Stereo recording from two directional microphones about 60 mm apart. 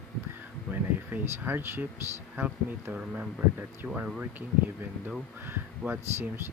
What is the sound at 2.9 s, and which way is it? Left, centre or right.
Speech, right.